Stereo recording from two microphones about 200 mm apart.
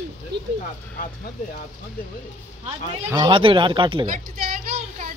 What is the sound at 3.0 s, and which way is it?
Speech, 20° right (ahead or behind).